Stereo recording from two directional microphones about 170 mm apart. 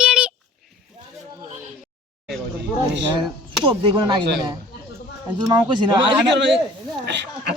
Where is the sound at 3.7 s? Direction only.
30° right (ahead or behind).